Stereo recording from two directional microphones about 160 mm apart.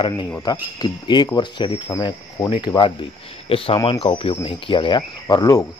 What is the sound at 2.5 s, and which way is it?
Speech, 30° left (ahead or behind).